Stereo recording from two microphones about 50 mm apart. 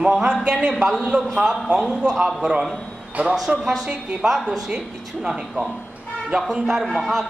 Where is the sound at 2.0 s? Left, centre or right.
Centre.